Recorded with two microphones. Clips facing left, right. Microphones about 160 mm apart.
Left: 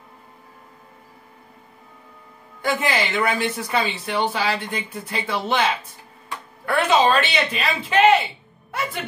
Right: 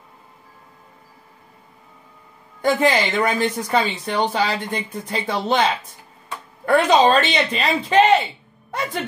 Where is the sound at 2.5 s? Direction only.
30° right (ahead or behind).